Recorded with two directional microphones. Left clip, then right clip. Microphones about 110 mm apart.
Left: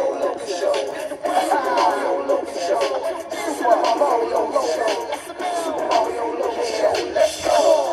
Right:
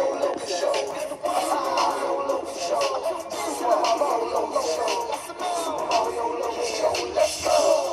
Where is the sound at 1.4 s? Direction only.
30° right (ahead or behind).